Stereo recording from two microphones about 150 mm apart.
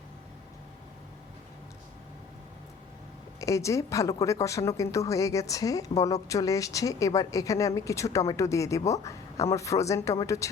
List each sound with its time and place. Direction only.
3.4 s a woman's voice: 20° left (ahead or behind)